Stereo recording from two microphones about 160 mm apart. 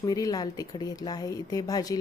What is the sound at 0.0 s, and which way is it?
Speech, 20° left (ahead or behind).